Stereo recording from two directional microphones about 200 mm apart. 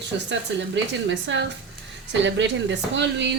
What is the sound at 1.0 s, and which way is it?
Speech, 65° right (ahead or behind).